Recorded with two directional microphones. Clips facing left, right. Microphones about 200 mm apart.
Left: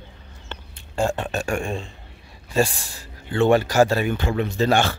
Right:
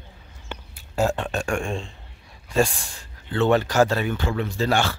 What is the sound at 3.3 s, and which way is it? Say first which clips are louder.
Speech: left 2 dB; 10° left (ahead or behind).